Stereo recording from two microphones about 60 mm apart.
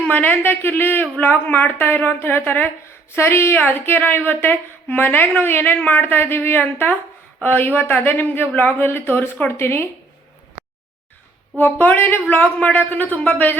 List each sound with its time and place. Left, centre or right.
0.0 s speech: left
11.5 s speech: left
12.5 s speech: left